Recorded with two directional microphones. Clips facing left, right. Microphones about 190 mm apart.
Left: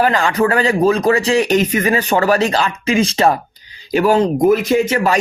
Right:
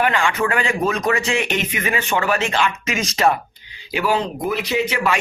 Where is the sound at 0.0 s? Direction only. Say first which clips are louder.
Left 5 dB; 40° left (ahead or behind).